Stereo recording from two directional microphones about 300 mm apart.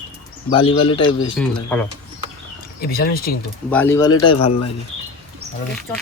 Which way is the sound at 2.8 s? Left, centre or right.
Left.